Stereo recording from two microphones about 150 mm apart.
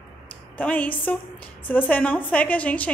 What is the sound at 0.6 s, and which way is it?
A woman's voice, 10° left (ahead or behind).